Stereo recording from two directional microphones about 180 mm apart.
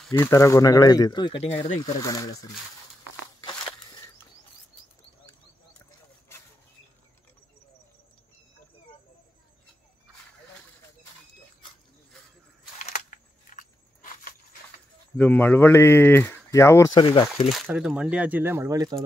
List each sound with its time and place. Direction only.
0.1 s speech: 15° left (ahead or behind)
12.8 s a sound: 40° left (ahead or behind)
15.1 s speech: 10° left (ahead or behind)
17.0 s speech: 30° left (ahead or behind)
17.6 s speech: 5° right (ahead or behind)